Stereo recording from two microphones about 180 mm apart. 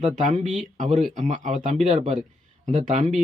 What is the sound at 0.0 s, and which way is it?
Speech, 45° right (ahead or behind).